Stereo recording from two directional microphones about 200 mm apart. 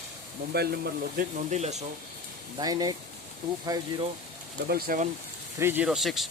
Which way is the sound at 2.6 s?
20° right (ahead or behind).